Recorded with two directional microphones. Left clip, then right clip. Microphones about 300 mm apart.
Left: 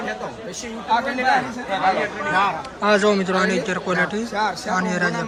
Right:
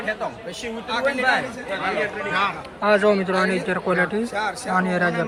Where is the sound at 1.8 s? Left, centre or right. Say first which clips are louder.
Left 4 dB; left.